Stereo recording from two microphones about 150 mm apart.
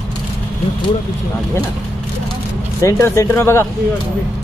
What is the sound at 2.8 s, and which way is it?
Speech, 20° left (ahead or behind).